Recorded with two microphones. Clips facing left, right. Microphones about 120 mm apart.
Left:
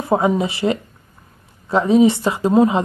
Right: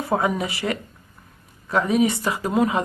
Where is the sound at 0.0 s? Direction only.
25° left (ahead or behind).